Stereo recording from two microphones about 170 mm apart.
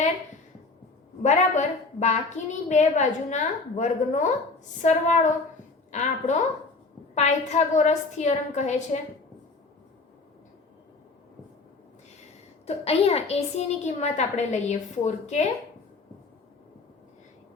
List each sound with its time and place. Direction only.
1.2 s a woman's voice: 45° left (ahead or behind)
12.6 s a woman's voice: 35° left (ahead or behind)